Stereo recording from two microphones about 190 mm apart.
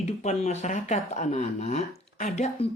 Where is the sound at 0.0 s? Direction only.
35° left (ahead or behind).